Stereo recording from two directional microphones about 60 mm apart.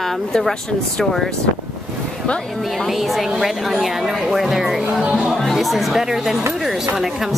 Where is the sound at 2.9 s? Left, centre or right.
Centre.